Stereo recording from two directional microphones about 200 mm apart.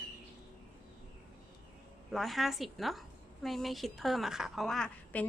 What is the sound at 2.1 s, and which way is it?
A woman's voice, centre (ahead or behind).